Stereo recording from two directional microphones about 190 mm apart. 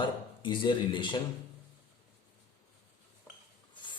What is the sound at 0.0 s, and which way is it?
Speech, 25° left (ahead or behind).